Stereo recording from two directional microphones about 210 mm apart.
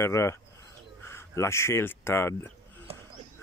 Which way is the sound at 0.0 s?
15° left (ahead or behind).